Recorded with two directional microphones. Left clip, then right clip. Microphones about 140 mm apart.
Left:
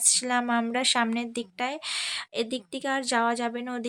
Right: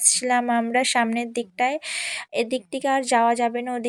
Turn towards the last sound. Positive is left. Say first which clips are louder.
# right 7 dB
turn(degrees=-15)  # may be behind; listen again after turning